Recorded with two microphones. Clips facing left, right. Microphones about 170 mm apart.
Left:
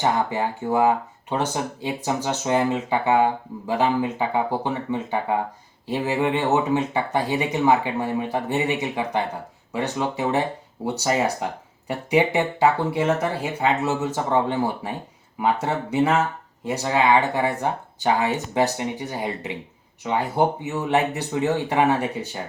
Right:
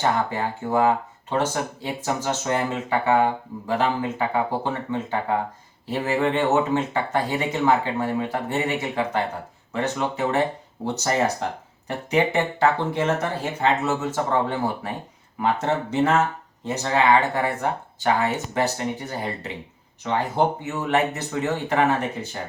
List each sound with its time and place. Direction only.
0.0 s speech: 15° left (ahead or behind)
15.6 s speech: 10° left (ahead or behind)